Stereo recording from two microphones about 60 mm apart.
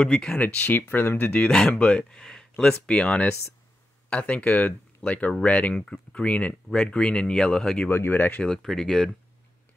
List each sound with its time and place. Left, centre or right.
0.0 s speech: left
0.8 s speech: left
1.1 s speech: left; by 2.4 s centre
2.9 s speech: centre
7.9 s speech: left
8.4 s speech: centre